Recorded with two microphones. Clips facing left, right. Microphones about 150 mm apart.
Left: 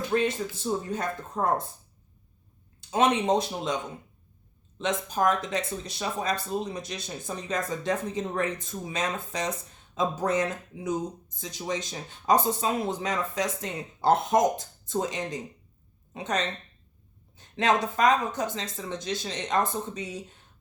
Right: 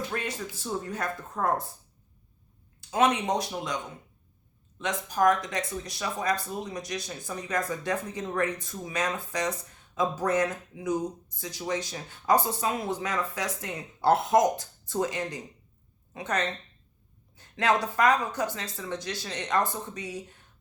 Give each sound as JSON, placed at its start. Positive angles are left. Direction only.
{"t": 0.1, "sound": "speech", "side_deg": 25}
{"t": 2.9, "sound": "speech", "side_deg": 25}
{"t": 4.8, "sound": "speech", "side_deg": 25}